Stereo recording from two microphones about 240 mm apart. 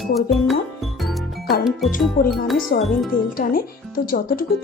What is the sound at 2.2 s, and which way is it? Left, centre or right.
Speech, left.